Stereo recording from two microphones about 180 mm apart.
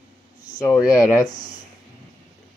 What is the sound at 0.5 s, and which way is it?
Speech, 20° left (ahead or behind).